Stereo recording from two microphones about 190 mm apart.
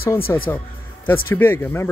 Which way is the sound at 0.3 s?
15° left (ahead or behind).